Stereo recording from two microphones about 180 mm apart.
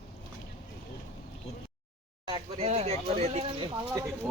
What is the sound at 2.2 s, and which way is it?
Speech, 30° right (ahead or behind).